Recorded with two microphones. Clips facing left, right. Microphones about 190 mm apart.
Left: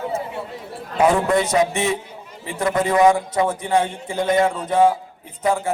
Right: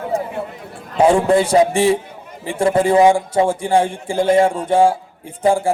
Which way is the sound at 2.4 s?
30° right (ahead or behind).